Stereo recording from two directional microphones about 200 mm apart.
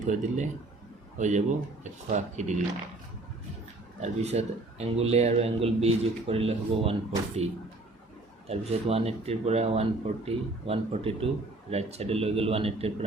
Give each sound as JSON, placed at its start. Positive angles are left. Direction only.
{"t": 0.1, "sound": "speech", "side_deg": -35}
{"t": 4.0, "sound": "speech", "side_deg": -35}